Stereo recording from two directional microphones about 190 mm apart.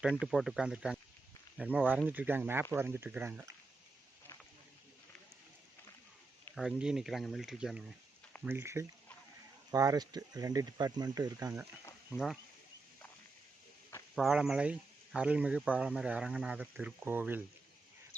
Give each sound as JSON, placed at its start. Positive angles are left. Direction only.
{"t": 0.2, "sound": "speech", "side_deg": 0}
{"t": 6.5, "sound": "speech", "side_deg": 0}
{"t": 12.1, "sound": "speech", "side_deg": 0}
{"t": 14.2, "sound": "speech", "side_deg": 0}